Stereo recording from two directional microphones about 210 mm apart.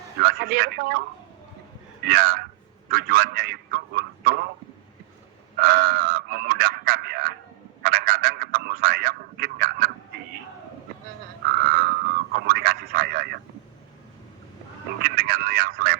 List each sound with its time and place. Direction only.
0.2 s a man's voice: 45° right (ahead or behind)
2.0 s a man's voice: 45° right (ahead or behind)
5.5 s a sound: 45° right (ahead or behind)
11.6 s frog: 45° right (ahead or behind)
12.3 s radio: 45° right (ahead or behind)
15.0 s a sound: 45° right (ahead or behind)